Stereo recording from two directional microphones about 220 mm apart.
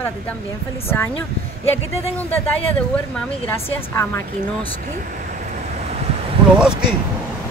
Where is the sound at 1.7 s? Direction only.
10° left (ahead or behind).